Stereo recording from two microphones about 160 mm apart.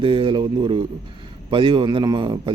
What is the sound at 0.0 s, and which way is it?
Speech, 35° right (ahead or behind).